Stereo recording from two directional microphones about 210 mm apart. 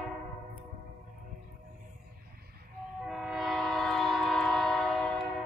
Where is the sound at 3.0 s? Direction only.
Centre (ahead or behind).